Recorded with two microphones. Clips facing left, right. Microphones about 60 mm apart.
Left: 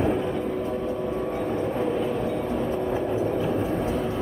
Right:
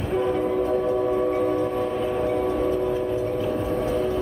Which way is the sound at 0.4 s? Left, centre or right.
Right.